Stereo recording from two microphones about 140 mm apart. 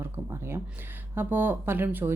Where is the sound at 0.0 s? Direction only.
20° right (ahead or behind).